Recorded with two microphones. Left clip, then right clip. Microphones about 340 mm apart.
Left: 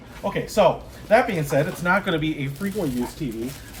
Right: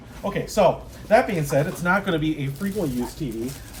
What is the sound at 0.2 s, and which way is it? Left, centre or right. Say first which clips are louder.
Speech: left 1 dB; centre.